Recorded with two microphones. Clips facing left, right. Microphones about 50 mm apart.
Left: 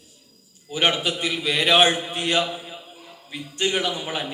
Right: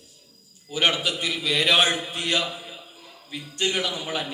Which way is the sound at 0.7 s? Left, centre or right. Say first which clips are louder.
Left 1 dB; left.